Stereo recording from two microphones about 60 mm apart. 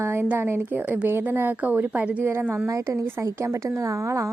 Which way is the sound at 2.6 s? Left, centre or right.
Right.